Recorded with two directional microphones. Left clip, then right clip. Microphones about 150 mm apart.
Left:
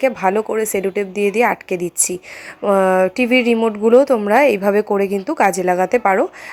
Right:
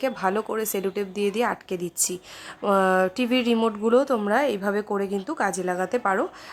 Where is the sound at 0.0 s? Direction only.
15° left (ahead or behind).